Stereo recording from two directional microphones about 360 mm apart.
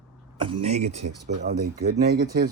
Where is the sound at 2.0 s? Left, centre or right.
Right.